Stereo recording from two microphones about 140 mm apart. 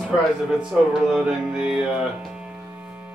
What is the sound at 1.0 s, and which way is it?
Music, 5° right (ahead or behind).